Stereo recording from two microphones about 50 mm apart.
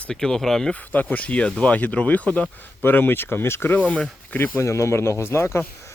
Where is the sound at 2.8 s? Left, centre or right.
Left.